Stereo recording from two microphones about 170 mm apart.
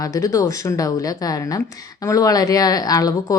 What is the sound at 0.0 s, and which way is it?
A woman's voice, 20° left (ahead or behind).